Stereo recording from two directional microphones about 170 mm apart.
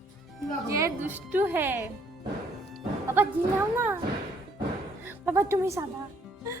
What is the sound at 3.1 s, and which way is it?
Speech, 10° right (ahead or behind).